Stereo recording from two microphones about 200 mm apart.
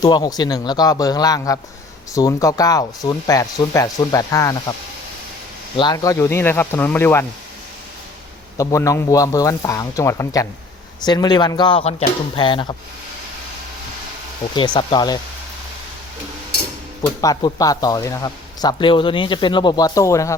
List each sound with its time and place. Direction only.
0.0 s speech: 20° left (ahead or behind)
5.7 s speech: 20° left (ahead or behind)
8.5 s speech: 15° left (ahead or behind)
14.5 s speech: 25° left (ahead or behind)
17.2 s speech: 20° left (ahead or behind)